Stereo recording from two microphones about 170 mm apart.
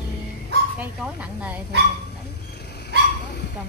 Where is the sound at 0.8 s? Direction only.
10° right (ahead or behind).